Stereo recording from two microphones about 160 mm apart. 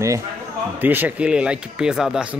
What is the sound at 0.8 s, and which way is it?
Speech, 10° right (ahead or behind).